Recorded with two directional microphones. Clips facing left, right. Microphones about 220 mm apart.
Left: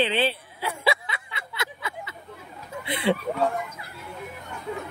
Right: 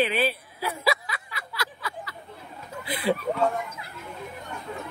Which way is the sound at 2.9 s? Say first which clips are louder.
Left 1 dB; 25° left (ahead or behind).